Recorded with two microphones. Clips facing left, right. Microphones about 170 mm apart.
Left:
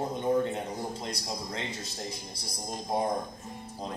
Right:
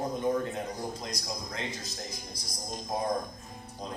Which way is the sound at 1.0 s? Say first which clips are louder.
Left 2 dB; 30° left (ahead or behind).